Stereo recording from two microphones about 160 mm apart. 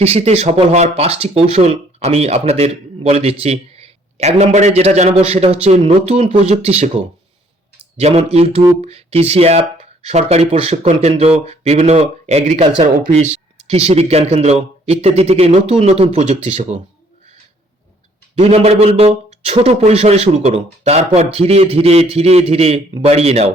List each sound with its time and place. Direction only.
0.0 s a man's voice: 40° right (ahead or behind)
18.3 s a man's voice: 40° right (ahead or behind)